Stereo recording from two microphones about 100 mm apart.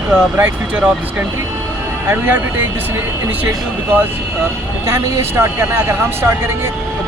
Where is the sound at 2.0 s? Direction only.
20° right (ahead or behind).